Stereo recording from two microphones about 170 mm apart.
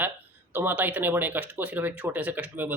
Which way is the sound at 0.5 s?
10° right (ahead or behind).